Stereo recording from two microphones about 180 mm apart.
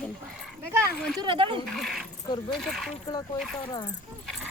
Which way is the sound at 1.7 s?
Centre (ahead or behind).